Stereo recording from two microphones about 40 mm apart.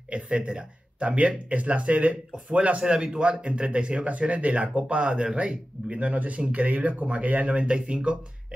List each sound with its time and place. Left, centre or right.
0.1 s speech: right
2.9 s speech: right